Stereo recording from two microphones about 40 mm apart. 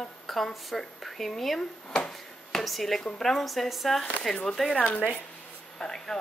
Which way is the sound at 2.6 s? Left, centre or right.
Centre.